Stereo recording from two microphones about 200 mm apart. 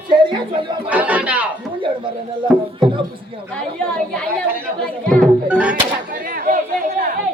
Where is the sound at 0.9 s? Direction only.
5° right (ahead or behind).